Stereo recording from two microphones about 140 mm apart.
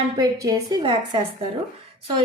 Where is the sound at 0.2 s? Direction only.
25° right (ahead or behind).